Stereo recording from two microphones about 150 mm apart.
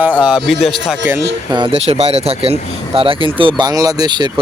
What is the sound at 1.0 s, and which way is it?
Speech, 15° right (ahead or behind).